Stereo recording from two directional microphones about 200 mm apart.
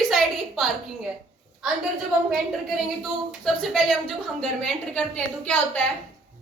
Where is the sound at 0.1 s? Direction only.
Centre (ahead or behind).